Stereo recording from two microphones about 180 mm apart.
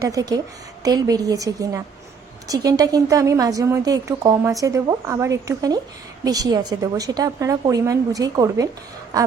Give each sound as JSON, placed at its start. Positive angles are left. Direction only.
{"t": 0.0, "sound": "a woman's voice", "side_deg": -20}